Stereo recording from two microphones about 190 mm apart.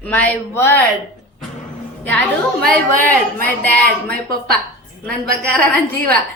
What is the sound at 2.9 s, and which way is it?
Speech, 50° right (ahead or behind).